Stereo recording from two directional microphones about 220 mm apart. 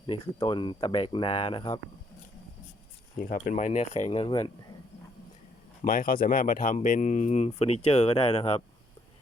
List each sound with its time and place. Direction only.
0.1 s speech: 20° left (ahead or behind)
3.2 s speech: 35° left (ahead or behind); by 4.5 s 20° left (ahead or behind)
5.8 s speech: 40° left (ahead or behind)